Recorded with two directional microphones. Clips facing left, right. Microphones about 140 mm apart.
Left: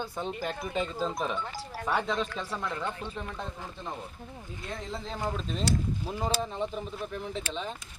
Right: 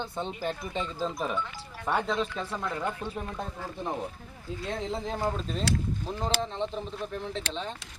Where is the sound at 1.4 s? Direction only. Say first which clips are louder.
Left 1 dB; 40° left (ahead or behind).